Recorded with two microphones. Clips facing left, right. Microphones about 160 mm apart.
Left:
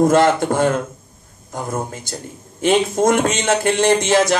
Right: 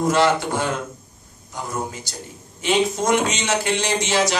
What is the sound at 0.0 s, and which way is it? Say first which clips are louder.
Speech: left 5 dB; 50° left (ahead or behind).